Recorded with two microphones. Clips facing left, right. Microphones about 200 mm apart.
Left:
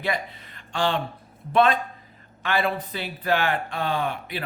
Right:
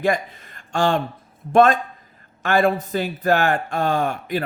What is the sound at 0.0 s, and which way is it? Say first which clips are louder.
A man's voice: right 7 dB; 45° right (ahead or behind).